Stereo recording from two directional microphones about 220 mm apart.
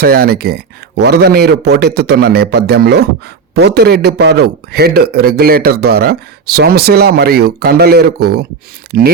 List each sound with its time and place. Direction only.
0.0 s a man's voice: 45° right (ahead or behind)